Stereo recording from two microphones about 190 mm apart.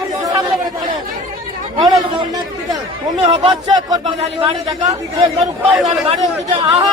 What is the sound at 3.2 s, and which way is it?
Speech, 25° right (ahead or behind).